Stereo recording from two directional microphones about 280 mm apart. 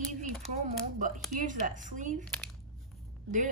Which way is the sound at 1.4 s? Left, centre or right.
Right.